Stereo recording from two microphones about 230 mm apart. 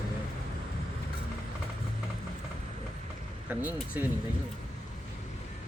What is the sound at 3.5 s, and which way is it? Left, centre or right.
Speech, centre.